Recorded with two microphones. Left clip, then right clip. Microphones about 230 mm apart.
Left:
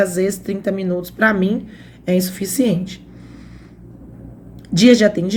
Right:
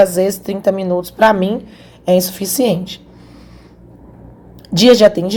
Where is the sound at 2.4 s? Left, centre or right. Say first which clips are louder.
Right 4 dB; centre.